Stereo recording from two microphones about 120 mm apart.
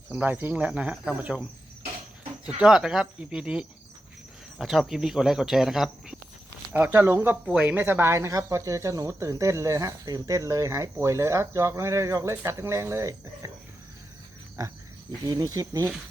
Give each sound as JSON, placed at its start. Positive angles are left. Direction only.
{"t": 0.1, "sound": "speech", "side_deg": -15}
{"t": 2.5, "sound": "speech", "side_deg": -5}
{"t": 6.7, "sound": "speech", "side_deg": -15}
{"t": 14.6, "sound": "speech", "side_deg": -25}